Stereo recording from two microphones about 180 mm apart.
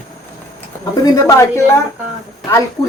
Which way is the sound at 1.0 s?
20° left (ahead or behind).